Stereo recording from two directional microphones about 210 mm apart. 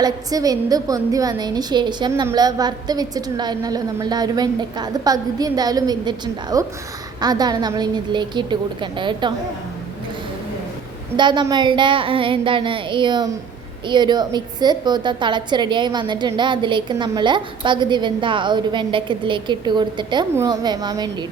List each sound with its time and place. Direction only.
0.0 s a woman's voice: 15° right (ahead or behind)
11.2 s a woman's voice: 20° right (ahead or behind)